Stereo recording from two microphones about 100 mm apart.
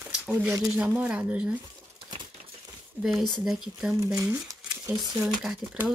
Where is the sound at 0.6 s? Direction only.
5° right (ahead or behind).